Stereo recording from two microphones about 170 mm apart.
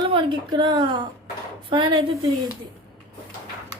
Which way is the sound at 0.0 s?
30° right (ahead or behind).